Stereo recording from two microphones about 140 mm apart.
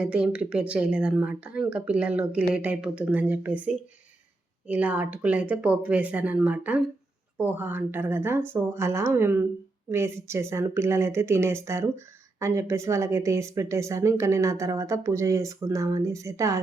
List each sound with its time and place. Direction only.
0.0 s speech: 10° right (ahead or behind)